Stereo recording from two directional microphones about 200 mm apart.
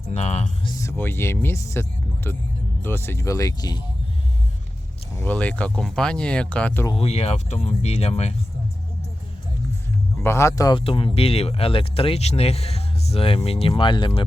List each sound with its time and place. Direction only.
0.1 s music: 35° left (ahead or behind)
0.7 s speech: 15° left (ahead or behind)
5.1 s speech: 5° left (ahead or behind)
6.8 s speech: 30° left (ahead or behind)
10.2 s speech: 15° left (ahead or behind)